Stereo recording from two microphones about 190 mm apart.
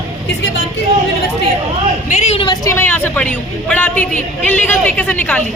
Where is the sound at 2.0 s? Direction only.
35° left (ahead or behind).